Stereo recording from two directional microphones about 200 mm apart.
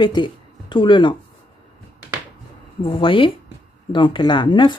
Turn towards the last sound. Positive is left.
turn(degrees=25)  # may be behind; listen again after turning